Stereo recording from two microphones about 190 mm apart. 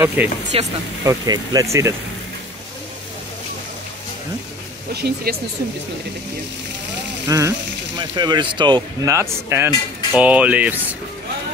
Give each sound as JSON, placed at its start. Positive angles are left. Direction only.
{"t": 0.0, "sound": "speech", "side_deg": -10}
{"t": 0.5, "sound": "speech", "side_deg": -30}
{"t": 1.0, "sound": "speech", "side_deg": -20}
{"t": 4.9, "sound": "speech", "side_deg": -55}
{"t": 7.2, "sound": "speech", "side_deg": -15}